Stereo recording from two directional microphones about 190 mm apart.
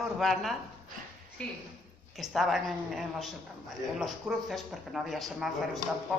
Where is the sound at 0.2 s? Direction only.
Centre (ahead or behind).